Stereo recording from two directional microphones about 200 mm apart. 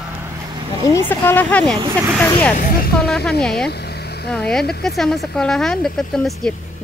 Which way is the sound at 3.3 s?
Centre (ahead or behind).